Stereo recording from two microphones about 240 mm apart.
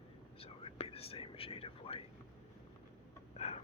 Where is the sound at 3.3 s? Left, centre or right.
Left.